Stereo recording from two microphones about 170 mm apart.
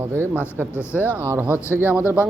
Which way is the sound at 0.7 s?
15° left (ahead or behind).